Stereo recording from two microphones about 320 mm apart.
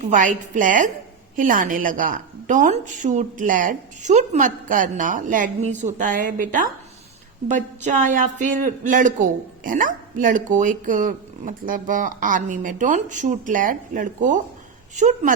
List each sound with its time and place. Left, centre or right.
0.0 s a woman's voice: right